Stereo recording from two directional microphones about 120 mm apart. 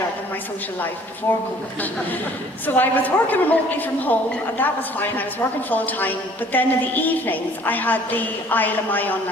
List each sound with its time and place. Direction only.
1.3 s speech: 20° left (ahead or behind)
2.6 s a woman's voice: 15° left (ahead or behind)